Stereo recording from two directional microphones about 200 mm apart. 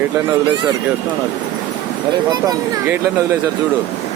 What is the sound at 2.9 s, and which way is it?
Speech, 10° right (ahead or behind).